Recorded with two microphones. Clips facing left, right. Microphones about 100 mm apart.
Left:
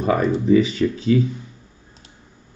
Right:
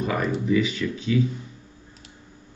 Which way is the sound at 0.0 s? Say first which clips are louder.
Left 6 dB; 35° left (ahead or behind).